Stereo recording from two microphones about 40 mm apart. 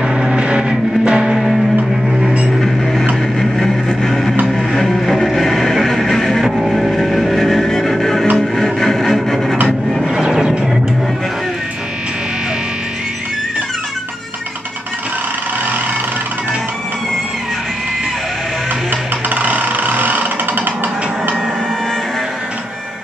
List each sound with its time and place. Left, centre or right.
0.1 s music: centre
1.3 s music: centre
2.6 s a sound: centre
3.3 s vehicle: centre
4.5 s music: centre
6.4 s music: centre
10.2 s music: centre
18.9 s ratchet: right